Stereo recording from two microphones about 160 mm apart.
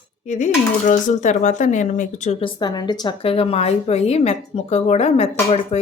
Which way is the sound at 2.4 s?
25° left (ahead or behind).